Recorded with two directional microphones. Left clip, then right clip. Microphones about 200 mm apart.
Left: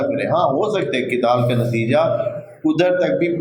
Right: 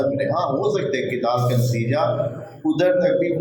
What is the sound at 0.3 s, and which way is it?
Speech, 40° left (ahead or behind).